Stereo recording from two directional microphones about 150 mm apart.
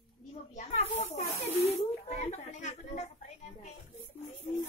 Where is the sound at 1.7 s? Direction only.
45° left (ahead or behind).